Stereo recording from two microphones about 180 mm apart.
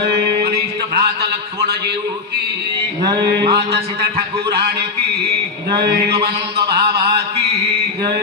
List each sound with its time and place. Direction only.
0.0 s music: 60° right (ahead or behind)
3.2 s mantra: 65° right (ahead or behind)
5.7 s mantra: 60° right (ahead or behind)